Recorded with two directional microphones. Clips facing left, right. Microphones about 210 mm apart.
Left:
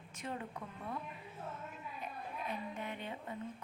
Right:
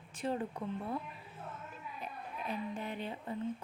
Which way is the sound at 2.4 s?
35° right (ahead or behind).